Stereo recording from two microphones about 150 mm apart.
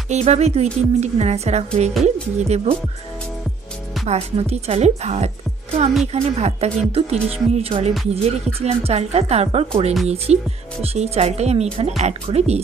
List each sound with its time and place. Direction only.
0.1 s speech: 45° right (ahead or behind)
4.0 s speech: 45° right (ahead or behind)
8.1 s music: 40° right (ahead or behind)
8.5 s speech: 45° right (ahead or behind)